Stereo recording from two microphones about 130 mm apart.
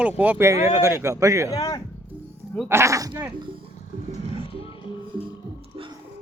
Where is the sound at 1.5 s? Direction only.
35° left (ahead or behind).